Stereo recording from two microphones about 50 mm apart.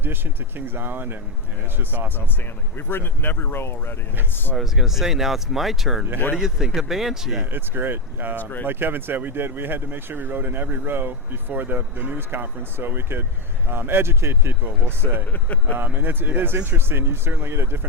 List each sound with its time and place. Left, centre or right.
0.0 s speech: right
2.7 s speech: left
4.5 s speech: centre
7.5 s speech: right
8.4 s speech: left
8.6 s speech: right
14.6 s speech: right